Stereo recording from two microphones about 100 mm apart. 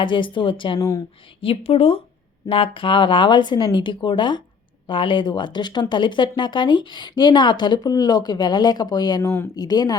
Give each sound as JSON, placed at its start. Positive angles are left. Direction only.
{"t": 0.0, "sound": "speech", "side_deg": 55}
{"t": 0.8, "sound": "speech", "side_deg": 35}
{"t": 1.4, "sound": "a woman's voice", "side_deg": 70}
{"t": 2.5, "sound": "speech", "side_deg": 60}
{"t": 9.2, "sound": "speech", "side_deg": 25}
{"t": 9.6, "sound": "speech", "side_deg": 40}